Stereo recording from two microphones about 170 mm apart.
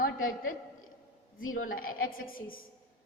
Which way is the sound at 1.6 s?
55° left (ahead or behind).